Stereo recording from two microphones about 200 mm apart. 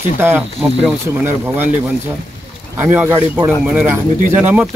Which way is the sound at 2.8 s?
10° right (ahead or behind).